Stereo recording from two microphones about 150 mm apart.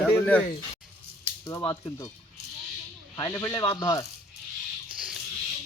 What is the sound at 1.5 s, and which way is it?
Speech, 20° left (ahead or behind).